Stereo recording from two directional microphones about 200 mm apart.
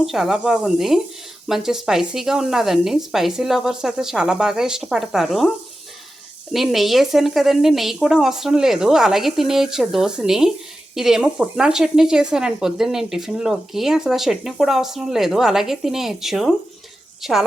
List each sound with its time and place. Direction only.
0.0 s speech: centre (ahead or behind)
6.5 s speech: centre (ahead or behind)